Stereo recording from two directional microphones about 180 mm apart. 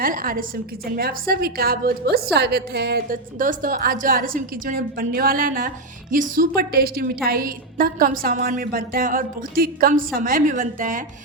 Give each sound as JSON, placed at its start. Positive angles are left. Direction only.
{"t": 0.0, "sound": "a woman's voice", "side_deg": -50}